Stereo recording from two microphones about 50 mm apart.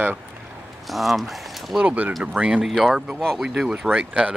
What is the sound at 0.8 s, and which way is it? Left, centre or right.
Speech, centre.